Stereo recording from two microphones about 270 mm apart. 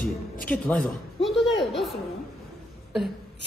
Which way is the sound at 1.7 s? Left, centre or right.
Centre.